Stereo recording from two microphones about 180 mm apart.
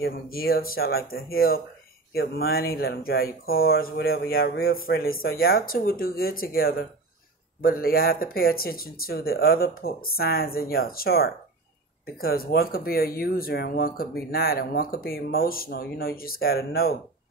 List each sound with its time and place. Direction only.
0.0 s speech: 60° left (ahead or behind)